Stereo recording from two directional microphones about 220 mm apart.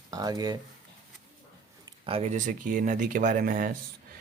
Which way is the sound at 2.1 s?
30° right (ahead or behind).